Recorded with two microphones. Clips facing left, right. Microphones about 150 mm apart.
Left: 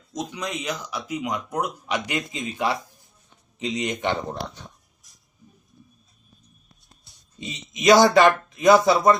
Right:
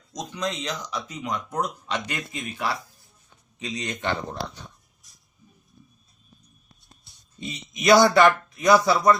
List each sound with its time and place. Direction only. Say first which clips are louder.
0.1 s speech: even; 5° left (ahead or behind)
7.7 s speech: left 2 dB; 20° left (ahead or behind)